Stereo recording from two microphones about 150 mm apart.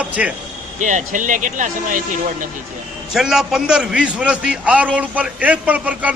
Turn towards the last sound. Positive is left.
turn(degrees=-10)  # may be behind; listen again after turning